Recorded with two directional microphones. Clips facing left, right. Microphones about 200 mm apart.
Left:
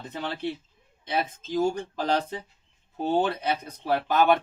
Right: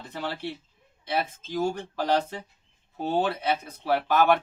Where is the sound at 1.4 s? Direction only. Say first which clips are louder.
Left 2 dB; 15° left (ahead or behind).